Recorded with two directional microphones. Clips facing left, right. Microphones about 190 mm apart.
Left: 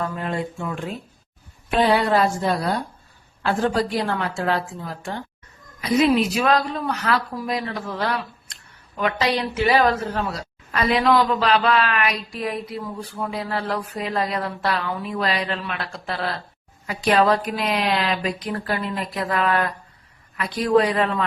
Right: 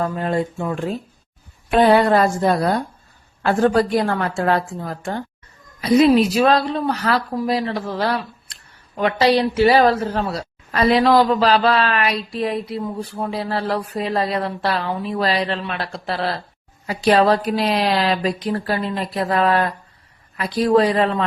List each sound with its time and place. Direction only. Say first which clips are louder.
0.0 s a man's voice: right 5 dB; 40° right (ahead or behind)
1.7 s a woman's voice: right 5 dB; 50° right (ahead or behind); by 21.2 s 30° right (ahead or behind)